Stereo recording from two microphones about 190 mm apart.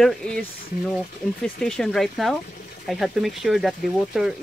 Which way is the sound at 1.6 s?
5° left (ahead or behind).